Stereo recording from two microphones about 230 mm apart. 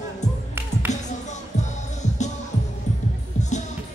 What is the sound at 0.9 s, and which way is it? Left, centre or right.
Music, left.